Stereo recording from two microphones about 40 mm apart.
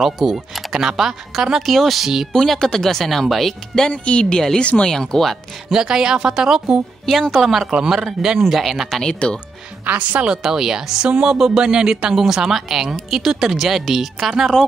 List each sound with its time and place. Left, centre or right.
0.0 s speech: centre
1.7 s speech: centre
3.9 s speech: left
4.4 s speech: centre
5.7 s speech: centre
7.1 s speech: centre
8.4 s speech: centre
9.0 s speech: left
10.3 s speech: centre